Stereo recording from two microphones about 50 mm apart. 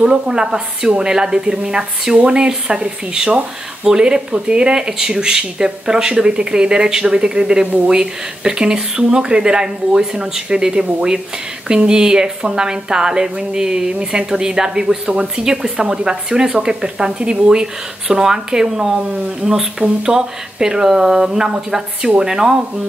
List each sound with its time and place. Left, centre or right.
0.0 s speech: centre
7.6 s speech: right
7.9 s speech: centre